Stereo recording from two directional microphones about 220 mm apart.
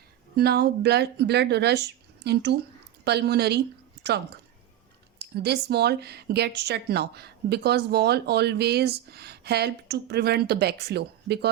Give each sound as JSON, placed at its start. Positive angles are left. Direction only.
{"t": 0.3, "sound": "speech", "side_deg": -45}
{"t": 5.2, "sound": "speech", "side_deg": -50}